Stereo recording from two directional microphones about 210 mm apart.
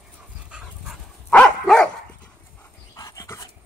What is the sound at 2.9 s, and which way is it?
Dog, 15° left (ahead or behind).